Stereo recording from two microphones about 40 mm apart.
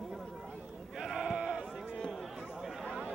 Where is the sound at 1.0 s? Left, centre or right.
Centre.